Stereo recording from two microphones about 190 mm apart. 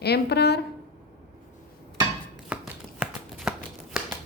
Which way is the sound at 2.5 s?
5° right (ahead or behind).